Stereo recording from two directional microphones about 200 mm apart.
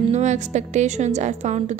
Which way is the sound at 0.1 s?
35° right (ahead or behind).